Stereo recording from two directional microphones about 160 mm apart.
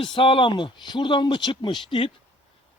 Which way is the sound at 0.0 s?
30° left (ahead or behind).